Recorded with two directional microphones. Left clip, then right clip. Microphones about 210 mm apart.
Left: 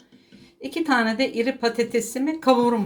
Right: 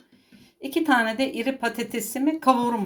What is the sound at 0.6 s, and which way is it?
Speech, 40° right (ahead or behind).